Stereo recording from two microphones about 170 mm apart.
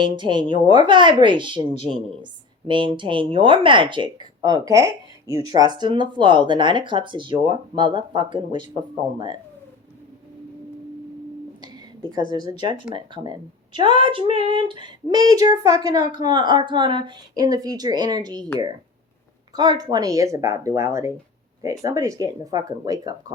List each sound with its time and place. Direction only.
0.0 s a woman's voice: 25° right (ahead or behind)
11.6 s a woman's voice: 25° right (ahead or behind)
19.5 s a woman's voice: 25° right (ahead or behind)